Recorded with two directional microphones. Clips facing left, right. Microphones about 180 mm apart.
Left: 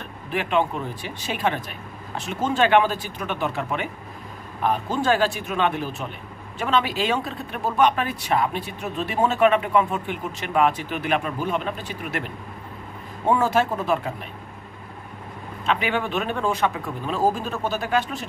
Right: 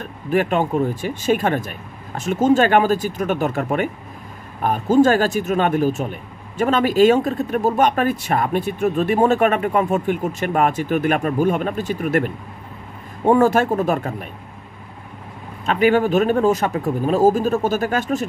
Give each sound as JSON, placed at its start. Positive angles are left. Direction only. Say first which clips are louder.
{"t": 0.0, "sound": "speech", "louder": "right 9 dB", "side_deg": -45}
{"t": 13.3, "sound": "speech", "louder": "right 6 dB", "side_deg": -50}
{"t": 15.6, "sound": "speech", "louder": "right 8 dB", "side_deg": -45}